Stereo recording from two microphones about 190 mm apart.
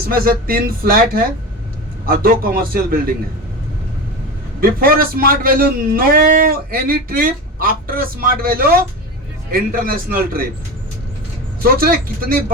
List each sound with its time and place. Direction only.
0.1 s a man's voice: 50° right (ahead or behind)
4.6 s a man's voice: 50° right (ahead or behind)
11.6 s a man's voice: 50° right (ahead or behind)